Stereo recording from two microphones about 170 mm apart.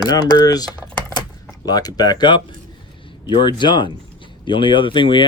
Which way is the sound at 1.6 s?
20° left (ahead or behind).